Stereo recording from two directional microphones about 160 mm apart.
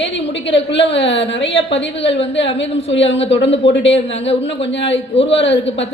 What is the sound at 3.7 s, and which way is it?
A woman's voice, 90° left.